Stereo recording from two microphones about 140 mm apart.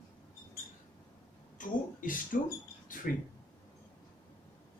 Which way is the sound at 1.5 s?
75° left (ahead or behind).